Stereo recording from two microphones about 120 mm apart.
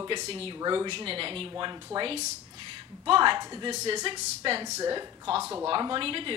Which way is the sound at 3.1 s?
40° right (ahead or behind).